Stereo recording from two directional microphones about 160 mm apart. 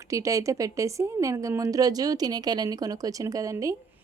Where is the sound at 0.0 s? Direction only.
20° right (ahead or behind).